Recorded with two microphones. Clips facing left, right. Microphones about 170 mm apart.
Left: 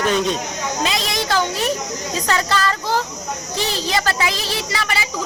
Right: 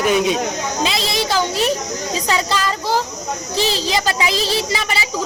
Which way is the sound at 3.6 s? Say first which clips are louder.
Right 4 dB; 90° right.